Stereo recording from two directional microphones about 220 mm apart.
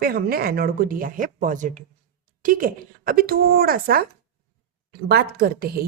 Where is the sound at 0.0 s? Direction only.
45° right (ahead or behind).